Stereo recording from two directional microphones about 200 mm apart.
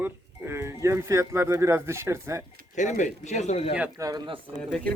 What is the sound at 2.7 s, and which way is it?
Speech, 40° left (ahead or behind).